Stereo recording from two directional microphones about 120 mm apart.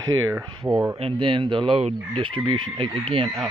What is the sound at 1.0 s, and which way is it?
Speech, 45° right (ahead or behind).